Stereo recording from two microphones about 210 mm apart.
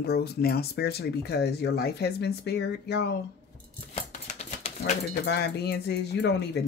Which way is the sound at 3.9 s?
30° left (ahead or behind).